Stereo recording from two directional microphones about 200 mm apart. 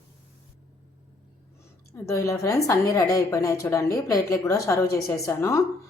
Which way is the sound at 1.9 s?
15° left (ahead or behind).